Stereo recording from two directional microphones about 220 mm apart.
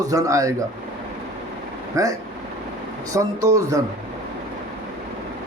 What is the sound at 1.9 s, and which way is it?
Speech, 15° right (ahead or behind).